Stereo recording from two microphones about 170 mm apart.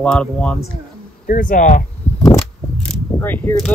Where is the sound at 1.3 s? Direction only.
55° left (ahead or behind).